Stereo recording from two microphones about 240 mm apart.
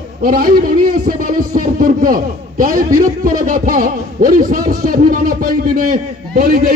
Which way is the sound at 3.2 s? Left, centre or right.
Right.